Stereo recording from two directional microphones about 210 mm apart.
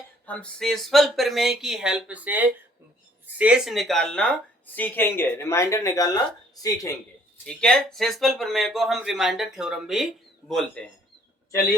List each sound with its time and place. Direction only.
0.3 s speech: 5° left (ahead or behind)
7.4 s speech: 5° left (ahead or behind)